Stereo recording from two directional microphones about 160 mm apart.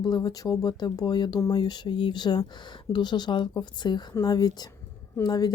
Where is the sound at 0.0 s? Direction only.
25° left (ahead or behind).